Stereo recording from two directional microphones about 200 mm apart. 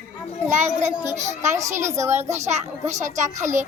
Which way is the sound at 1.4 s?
15° right (ahead or behind).